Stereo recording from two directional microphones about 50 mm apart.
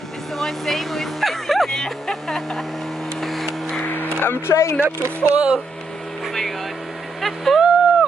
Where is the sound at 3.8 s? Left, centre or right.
Left.